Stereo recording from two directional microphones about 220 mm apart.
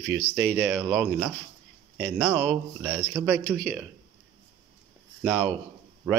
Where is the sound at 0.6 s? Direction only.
5° right (ahead or behind).